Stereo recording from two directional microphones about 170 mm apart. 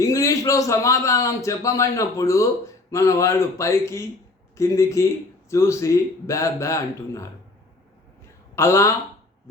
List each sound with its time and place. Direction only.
0.0 s a man's voice: 20° left (ahead or behind)
8.5 s speech: 15° left (ahead or behind)